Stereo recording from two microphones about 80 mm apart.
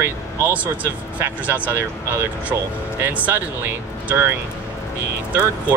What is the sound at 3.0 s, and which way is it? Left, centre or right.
Speech, right.